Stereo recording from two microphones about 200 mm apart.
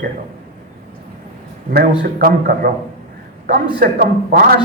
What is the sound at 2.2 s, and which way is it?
Speech, 45° right (ahead or behind).